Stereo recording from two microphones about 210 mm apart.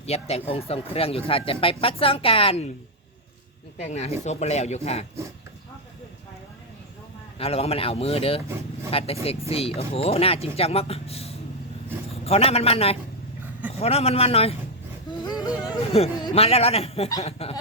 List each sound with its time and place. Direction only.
0.0 s speech: 30° left (ahead or behind)
3.8 s speech: 30° left (ahead or behind)
7.3 s a man's voice: 30° left (ahead or behind)
15.1 s a sound: 20° left (ahead or behind)
15.9 s speech: 30° left (ahead or behind)